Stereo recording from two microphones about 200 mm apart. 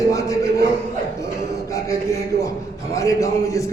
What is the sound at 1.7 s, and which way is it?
A man's voice, 15° left (ahead or behind).